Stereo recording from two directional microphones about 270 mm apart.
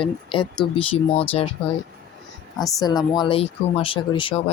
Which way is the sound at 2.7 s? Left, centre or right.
Centre.